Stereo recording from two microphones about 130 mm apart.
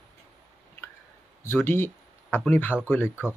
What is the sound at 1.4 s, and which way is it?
Speech, 15° left (ahead or behind).